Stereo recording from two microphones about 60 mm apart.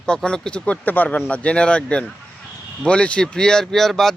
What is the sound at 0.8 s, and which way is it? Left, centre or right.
Speech, left.